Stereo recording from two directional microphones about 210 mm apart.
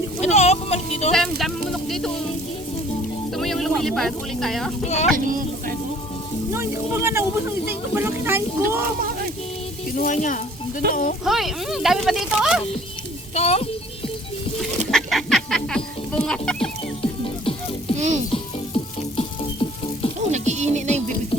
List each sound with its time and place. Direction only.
0.2 s a sound: 30° left (ahead or behind)
1.1 s a sound: centre (ahead or behind)
3.3 s music: centre (ahead or behind)
4.8 s speech: 30° left (ahead or behind)
5.1 s speech: 40° right (ahead or behind)
6.5 s speech: 10° right (ahead or behind)
10.0 s speech: 35° left (ahead or behind)
11.3 s speech: centre (ahead or behind)
13.3 s a child's voice: 30° left (ahead or behind)
14.6 s music: centre (ahead or behind)
17.0 s music: 25° left (ahead or behind)
17.9 s music: 35° right (ahead or behind)
18.3 s music: 25° left (ahead or behind)
20.3 s music: 35° right (ahead or behind)